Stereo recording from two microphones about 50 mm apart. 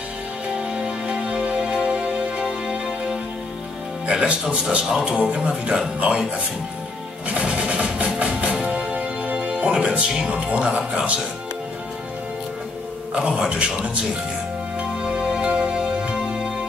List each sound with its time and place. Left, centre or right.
0.7 s music: centre
4.1 s speech: right
7.3 s music: right
10.1 s speech: centre
10.4 s speech: right
13.1 s speech: right
15.0 s music: centre